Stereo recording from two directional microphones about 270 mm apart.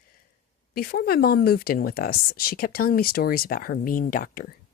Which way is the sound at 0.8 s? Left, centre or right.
Left.